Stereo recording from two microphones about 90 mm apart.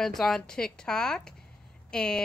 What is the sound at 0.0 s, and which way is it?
Speech, 5° left (ahead or behind).